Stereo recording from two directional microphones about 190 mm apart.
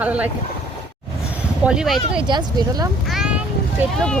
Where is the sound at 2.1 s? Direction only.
25° right (ahead or behind).